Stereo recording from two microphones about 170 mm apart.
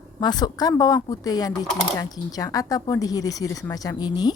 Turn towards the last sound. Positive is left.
turn(degrees=25)  # may be behind; listen again after turning